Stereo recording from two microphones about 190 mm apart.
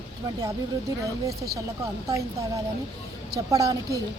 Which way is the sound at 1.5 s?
15° right (ahead or behind).